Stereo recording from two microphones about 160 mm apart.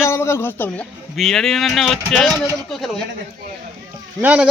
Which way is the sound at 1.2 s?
5° left (ahead or behind).